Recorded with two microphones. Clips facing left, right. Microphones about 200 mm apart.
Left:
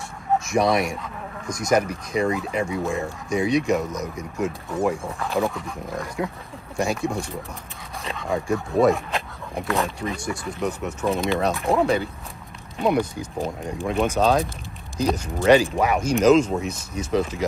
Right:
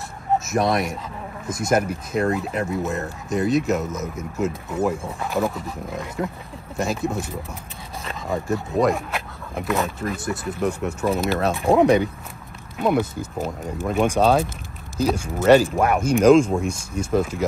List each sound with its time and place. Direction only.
0.5 s speech: centre (ahead or behind)
11.6 s speech: 15° right (ahead or behind)
12.7 s speech: 5° right (ahead or behind)
16.6 s speech: 50° right (ahead or behind)